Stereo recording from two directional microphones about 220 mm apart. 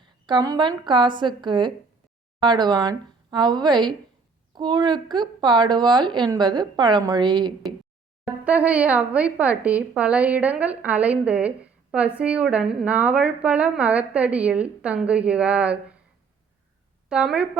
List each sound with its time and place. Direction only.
0.0 s a woman's voice: 20° right (ahead or behind)
8.4 s a woman's voice: 5° right (ahead or behind)
17.1 s a woman's voice: 5° right (ahead or behind)